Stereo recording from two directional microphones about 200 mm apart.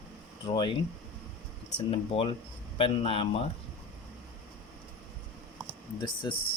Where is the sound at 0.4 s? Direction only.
25° left (ahead or behind).